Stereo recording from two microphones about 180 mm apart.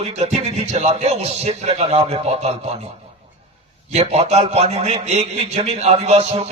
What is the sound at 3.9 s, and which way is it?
A man's voice, 35° right (ahead or behind).